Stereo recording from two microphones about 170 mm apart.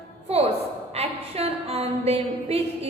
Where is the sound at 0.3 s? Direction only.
35° right (ahead or behind).